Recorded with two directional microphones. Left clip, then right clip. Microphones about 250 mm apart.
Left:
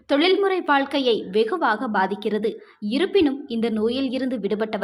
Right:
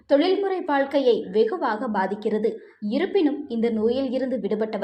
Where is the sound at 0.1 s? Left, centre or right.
Left.